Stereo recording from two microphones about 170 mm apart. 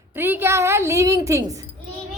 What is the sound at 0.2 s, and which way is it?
A woman's voice, 15° right (ahead or behind).